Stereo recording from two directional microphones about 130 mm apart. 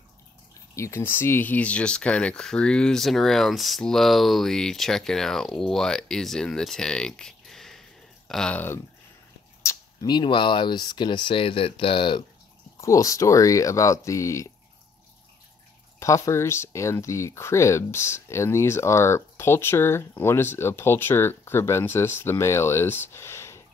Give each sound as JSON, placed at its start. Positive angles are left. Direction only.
{"t": 0.7, "sound": "speech", "side_deg": 20}
{"t": 9.6, "sound": "a sound", "side_deg": 20}
{"t": 10.1, "sound": "speech", "side_deg": 40}
{"t": 12.8, "sound": "speech", "side_deg": 25}
{"t": 16.0, "sound": "speech", "side_deg": 20}